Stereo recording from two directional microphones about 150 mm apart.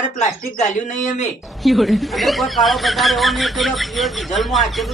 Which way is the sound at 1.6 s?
Centre (ahead or behind).